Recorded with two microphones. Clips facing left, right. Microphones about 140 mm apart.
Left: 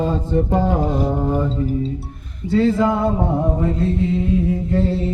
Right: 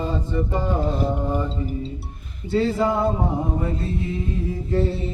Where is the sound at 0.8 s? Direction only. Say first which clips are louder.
Left 4 dB; 15° left (ahead or behind).